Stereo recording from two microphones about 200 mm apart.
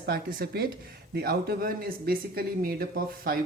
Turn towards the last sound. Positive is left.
turn(degrees=-50)  # may be behind; listen again after turning